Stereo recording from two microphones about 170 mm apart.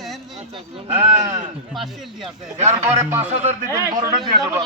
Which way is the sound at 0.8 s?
40° right (ahead or behind).